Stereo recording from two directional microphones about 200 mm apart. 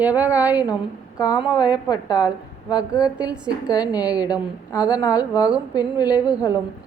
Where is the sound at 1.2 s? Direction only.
20° left (ahead or behind).